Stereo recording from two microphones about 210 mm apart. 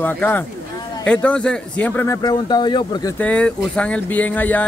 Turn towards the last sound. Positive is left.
turn(degrees=10)  # may be behind; listen again after turning